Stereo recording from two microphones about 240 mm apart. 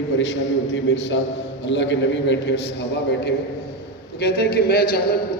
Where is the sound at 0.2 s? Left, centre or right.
Left.